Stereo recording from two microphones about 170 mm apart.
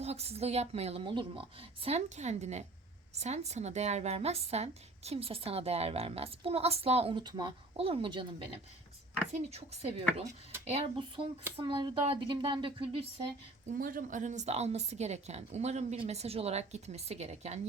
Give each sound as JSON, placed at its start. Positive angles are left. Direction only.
{"t": 0.0, "sound": "speech", "side_deg": -40}
{"t": 9.3, "sound": "speech", "side_deg": -40}
{"t": 10.7, "sound": "speech", "side_deg": -35}
{"t": 13.7, "sound": "speech", "side_deg": -55}